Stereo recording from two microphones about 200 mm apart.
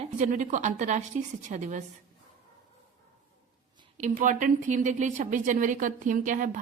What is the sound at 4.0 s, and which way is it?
A woman's voice, 40° right (ahead or behind).